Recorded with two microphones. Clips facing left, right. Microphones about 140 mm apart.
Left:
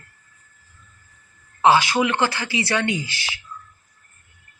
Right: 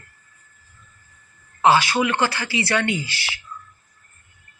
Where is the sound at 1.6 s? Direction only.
15° left (ahead or behind).